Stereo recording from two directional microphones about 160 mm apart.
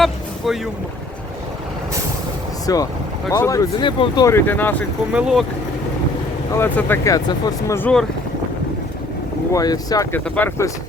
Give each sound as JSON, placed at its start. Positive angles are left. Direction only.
{"t": 0.0, "sound": "vehicle", "side_deg": 0}
{"t": 2.7, "sound": "speech", "side_deg": 25}
{"t": 5.1, "sound": "speech", "side_deg": -5}
{"t": 6.5, "sound": "speech", "side_deg": 15}
{"t": 7.8, "sound": "speech", "side_deg": 5}
{"t": 9.5, "sound": "speech", "side_deg": 20}
{"t": 10.2, "sound": "speech", "side_deg": 10}